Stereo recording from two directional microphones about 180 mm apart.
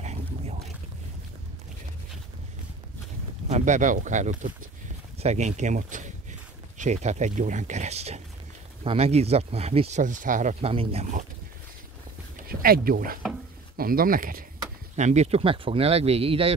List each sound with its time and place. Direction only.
0.0 s a sound: 40° right (ahead or behind)
3.4 s speech: 40° right (ahead or behind)
12.4 s speech: 55° right (ahead or behind)
15.0 s speech: 40° right (ahead or behind)